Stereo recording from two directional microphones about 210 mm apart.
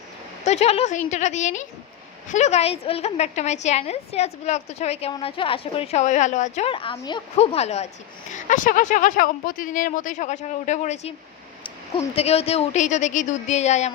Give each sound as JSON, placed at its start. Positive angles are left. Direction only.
{"t": 0.4, "sound": "a woman's voice", "side_deg": 30}